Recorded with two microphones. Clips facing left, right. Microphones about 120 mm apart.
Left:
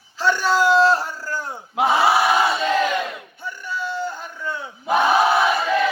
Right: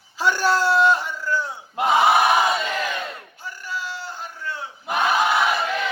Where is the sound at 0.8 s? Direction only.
35° left (ahead or behind).